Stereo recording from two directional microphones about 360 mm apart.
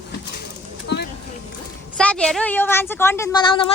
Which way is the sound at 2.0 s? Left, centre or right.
Centre.